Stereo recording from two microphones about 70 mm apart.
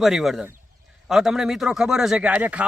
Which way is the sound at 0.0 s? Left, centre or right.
Centre.